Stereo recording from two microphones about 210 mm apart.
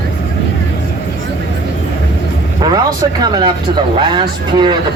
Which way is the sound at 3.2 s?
20° right (ahead or behind).